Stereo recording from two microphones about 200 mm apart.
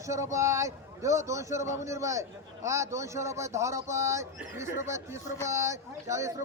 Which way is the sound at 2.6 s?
15° right (ahead or behind).